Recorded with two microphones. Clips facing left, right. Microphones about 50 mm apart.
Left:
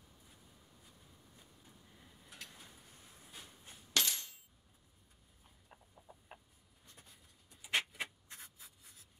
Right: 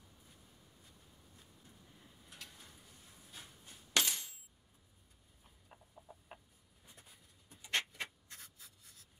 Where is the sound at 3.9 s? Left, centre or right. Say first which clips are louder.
Right 1 dB; centre.